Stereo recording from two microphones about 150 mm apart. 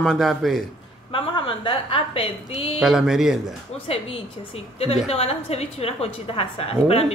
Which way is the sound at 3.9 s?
40° left (ahead or behind).